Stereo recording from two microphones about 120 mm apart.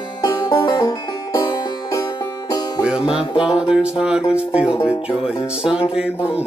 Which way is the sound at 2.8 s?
5° right (ahead or behind).